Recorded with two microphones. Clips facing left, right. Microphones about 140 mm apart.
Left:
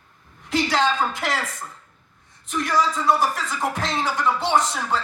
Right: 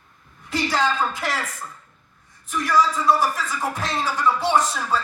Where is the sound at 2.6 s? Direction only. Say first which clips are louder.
Right 2 dB; 20° left (ahead or behind).